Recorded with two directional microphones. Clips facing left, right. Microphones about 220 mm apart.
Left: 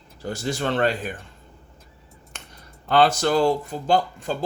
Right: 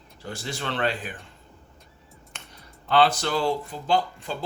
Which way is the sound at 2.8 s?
45° left (ahead or behind).